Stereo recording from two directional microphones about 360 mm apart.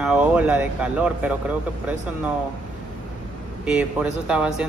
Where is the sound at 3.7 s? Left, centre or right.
Centre.